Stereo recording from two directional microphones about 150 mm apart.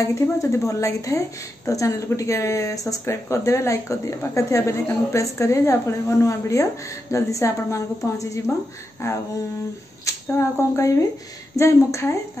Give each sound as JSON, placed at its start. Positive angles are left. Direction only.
{"t": 0.0, "sound": "speech", "side_deg": 20}